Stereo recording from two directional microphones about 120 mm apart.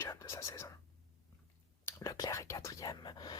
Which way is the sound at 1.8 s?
25° left (ahead or behind).